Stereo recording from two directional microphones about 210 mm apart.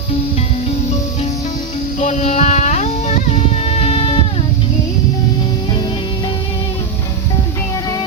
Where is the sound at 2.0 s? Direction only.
35° left (ahead or behind).